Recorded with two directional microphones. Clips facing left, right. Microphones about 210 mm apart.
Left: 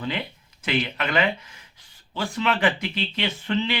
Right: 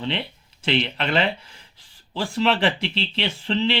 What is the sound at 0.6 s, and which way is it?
Speech, 30° right (ahead or behind).